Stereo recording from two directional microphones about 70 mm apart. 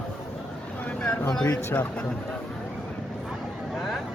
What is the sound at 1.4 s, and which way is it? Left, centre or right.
Speech, left.